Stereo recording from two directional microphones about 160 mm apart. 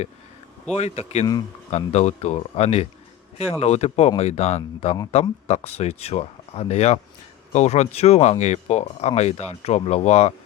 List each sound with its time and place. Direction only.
0.7 s speech: 45° left (ahead or behind)